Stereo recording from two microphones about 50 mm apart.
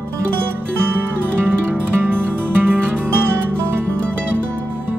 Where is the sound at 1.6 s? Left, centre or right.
Right.